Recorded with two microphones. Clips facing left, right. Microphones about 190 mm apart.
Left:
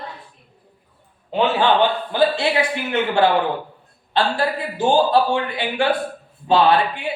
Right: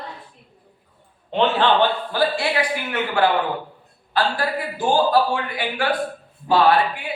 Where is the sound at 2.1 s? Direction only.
20° left (ahead or behind).